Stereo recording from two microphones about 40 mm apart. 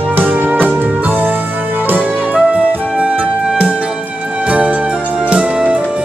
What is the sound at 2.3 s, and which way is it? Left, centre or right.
Music, right.